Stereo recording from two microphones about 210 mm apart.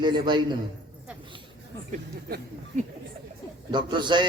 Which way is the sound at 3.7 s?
20° right (ahead or behind).